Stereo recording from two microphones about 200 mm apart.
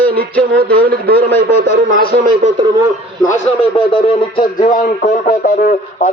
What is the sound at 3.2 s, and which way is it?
Speech, 35° left (ahead or behind).